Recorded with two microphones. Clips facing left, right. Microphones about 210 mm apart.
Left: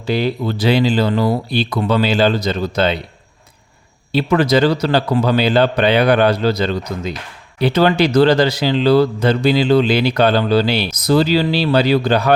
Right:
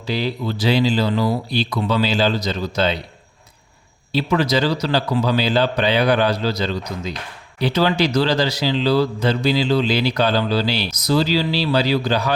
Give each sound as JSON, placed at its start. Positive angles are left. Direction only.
{"t": 0.0, "sound": "speech", "side_deg": 55}
{"t": 4.1, "sound": "speech", "side_deg": 55}